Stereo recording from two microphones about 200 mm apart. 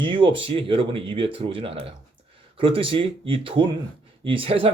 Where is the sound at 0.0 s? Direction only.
25° right (ahead or behind).